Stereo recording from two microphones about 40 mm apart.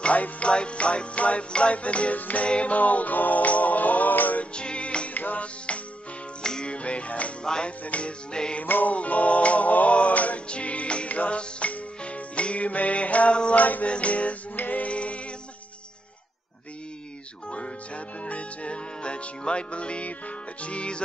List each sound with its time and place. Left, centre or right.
0.0 s music: left
4.6 s music: left
5.1 s music: left
6.4 s music: centre
6.7 s music: left
7.4 s music: centre
7.8 s music: left
8.6 s music: left
8.9 s music: left
14.5 s music: left
14.9 s a sound: left
17.5 s music: left